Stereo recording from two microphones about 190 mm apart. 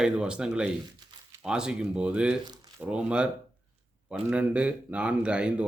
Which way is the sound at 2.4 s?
20° right (ahead or behind).